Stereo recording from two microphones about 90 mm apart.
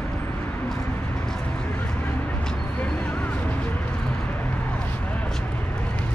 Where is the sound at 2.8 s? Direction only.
15° left (ahead or behind).